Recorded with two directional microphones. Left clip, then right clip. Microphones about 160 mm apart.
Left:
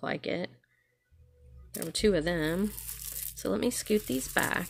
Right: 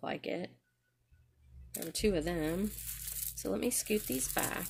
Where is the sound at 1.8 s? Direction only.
40° left (ahead or behind).